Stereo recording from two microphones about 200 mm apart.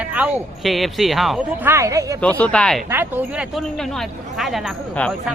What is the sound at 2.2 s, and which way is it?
Speech, 5° left (ahead or behind).